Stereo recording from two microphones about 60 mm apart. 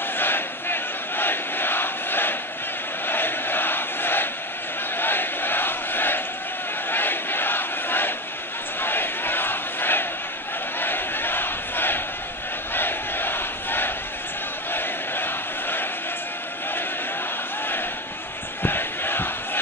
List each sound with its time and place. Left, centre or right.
0.2 s crowd: left
3.1 s a sound: left
4.9 s crowd: left
8.8 s battle cry: left
14.7 s crowd: left
18.6 s crowd: left